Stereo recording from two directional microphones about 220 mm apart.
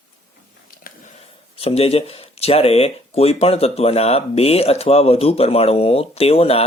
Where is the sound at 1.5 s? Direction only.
25° left (ahead or behind).